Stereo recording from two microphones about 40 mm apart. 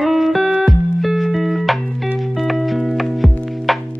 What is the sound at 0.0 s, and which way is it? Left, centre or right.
Music, centre.